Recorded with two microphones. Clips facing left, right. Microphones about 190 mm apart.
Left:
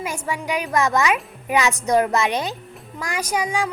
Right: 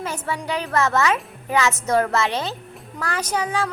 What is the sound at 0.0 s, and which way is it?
Speech, 10° left (ahead or behind).